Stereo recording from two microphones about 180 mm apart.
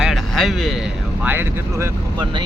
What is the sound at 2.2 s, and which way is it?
Speech, 25° right (ahead or behind).